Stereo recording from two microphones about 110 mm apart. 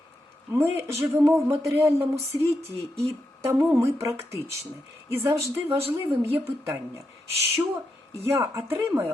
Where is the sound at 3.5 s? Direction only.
25° right (ahead or behind).